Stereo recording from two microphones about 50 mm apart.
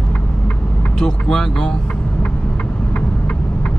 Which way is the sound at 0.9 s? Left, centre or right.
Centre.